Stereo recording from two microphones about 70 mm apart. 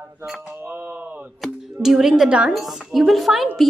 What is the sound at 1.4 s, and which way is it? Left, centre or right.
Speech, centre.